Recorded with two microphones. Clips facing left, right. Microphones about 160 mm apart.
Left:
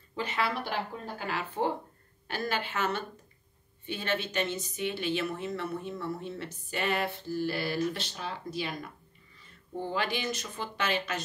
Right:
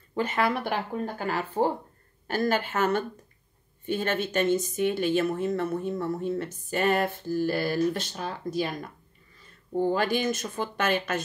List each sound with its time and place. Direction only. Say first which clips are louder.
0.1 s a woman's voice: right 6 dB; 50° right (ahead or behind)
9.8 s a woman's voice: right 7 dB; 45° right (ahead or behind)